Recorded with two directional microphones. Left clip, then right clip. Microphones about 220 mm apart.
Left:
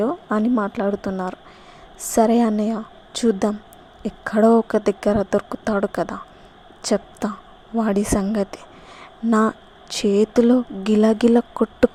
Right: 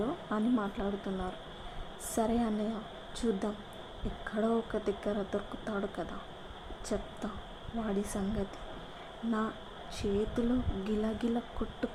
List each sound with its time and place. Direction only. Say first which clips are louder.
0.0 s a woman's voice: left 13 dB; 40° left (ahead or behind)
9.9 s a woman's voice: left 16 dB; 45° left (ahead or behind)